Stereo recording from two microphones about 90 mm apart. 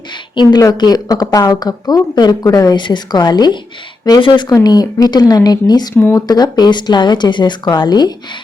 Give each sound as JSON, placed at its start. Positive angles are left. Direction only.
{"t": 0.6, "sound": "speech", "side_deg": 50}
{"t": 2.8, "sound": "speech", "side_deg": 55}
{"t": 4.5, "sound": "speech", "side_deg": 45}